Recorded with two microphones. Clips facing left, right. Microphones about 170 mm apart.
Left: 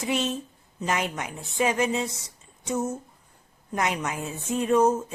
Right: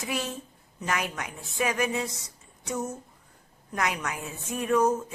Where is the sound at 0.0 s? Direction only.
25° left (ahead or behind).